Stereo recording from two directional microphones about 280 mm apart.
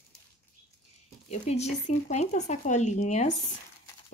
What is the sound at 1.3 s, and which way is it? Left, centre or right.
A woman's voice, left.